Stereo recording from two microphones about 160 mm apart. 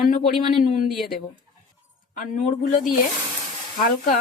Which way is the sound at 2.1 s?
55° left (ahead or behind).